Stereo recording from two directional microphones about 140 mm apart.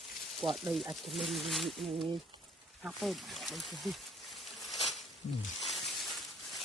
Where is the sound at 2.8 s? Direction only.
Centre (ahead or behind).